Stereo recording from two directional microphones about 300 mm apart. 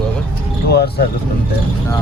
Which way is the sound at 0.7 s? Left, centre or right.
Left.